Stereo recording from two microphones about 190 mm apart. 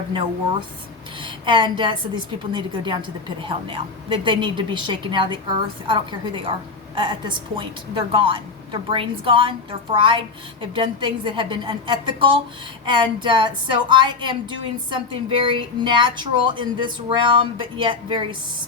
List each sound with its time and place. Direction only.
1.2 s a woman's voice: 25° right (ahead or behind)